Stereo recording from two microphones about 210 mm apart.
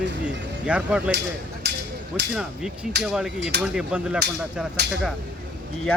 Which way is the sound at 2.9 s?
55° right (ahead or behind).